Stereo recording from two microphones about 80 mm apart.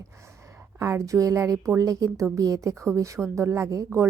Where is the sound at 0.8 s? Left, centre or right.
Right.